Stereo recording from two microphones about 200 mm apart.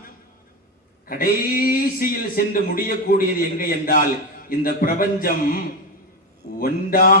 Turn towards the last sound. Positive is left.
turn(degrees=45)  # may be behind; listen again after turning